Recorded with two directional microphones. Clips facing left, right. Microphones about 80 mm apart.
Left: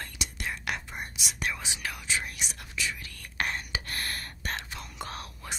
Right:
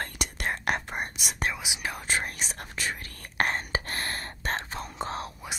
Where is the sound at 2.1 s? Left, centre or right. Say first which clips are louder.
Right 4 dB; right.